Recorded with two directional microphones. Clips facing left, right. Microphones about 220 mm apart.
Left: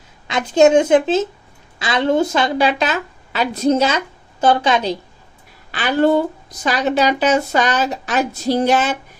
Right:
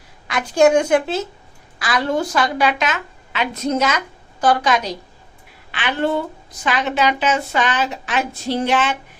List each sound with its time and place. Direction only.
0.3 s a woman's voice: 25° left (ahead or behind)
5.7 s a woman's voice: 40° left (ahead or behind)